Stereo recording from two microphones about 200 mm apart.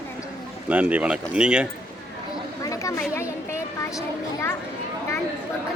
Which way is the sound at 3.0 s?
15° left (ahead or behind).